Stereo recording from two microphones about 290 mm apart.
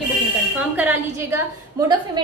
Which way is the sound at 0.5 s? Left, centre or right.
Centre.